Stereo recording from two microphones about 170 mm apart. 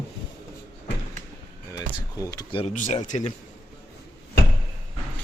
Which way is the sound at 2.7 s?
45° left (ahead or behind).